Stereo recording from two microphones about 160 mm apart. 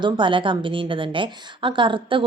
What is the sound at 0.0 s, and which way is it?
A woman's voice, 30° right (ahead or behind).